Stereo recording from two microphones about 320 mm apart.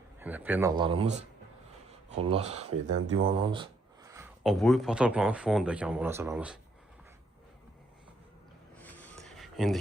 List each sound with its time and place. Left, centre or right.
0.2 s speech: centre
2.6 s speech: right
3.2 s speech: centre
4.1 s speech: centre
9.4 s a sound: centre